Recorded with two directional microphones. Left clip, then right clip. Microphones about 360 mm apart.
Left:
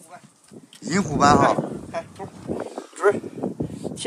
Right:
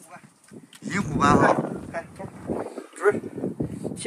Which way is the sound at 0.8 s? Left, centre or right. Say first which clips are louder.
Left 4 dB; centre.